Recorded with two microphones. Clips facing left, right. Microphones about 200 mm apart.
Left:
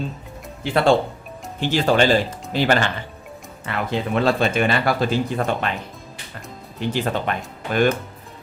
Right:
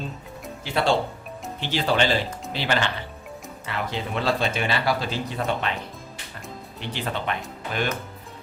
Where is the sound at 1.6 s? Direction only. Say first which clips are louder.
Left 5 dB; 45° left (ahead or behind).